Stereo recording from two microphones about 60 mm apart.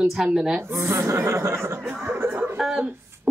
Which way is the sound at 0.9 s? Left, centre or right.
Right.